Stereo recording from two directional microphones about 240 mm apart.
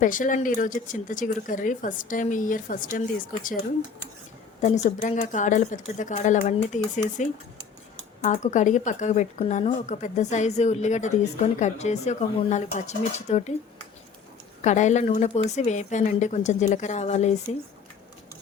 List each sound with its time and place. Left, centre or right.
0.0 s speech: left
4.6 s speech: left
8.2 s speech: left
14.6 s speech: left